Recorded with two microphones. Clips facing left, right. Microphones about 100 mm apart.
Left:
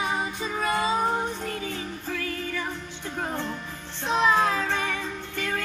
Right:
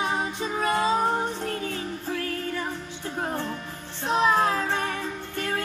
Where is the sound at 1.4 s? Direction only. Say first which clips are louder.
Right 2 dB; 50° right (ahead or behind).